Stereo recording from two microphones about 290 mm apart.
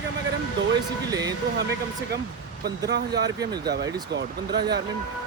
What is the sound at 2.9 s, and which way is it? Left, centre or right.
Speech, right.